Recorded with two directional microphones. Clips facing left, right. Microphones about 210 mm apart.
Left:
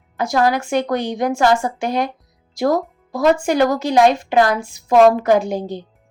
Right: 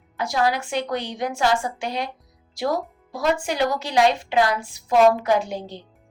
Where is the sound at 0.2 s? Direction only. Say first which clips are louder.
Left 5 dB; 45° left (ahead or behind).